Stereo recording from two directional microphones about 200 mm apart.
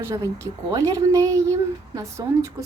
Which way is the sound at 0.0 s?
15° right (ahead or behind).